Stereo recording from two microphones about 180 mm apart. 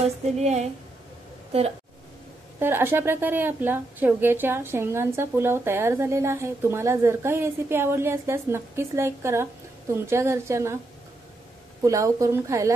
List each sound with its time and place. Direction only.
0.0 s a woman's voice: 40° right (ahead or behind)
2.6 s a woman's voice: 10° right (ahead or behind)
11.8 s a woman's voice: 15° right (ahead or behind)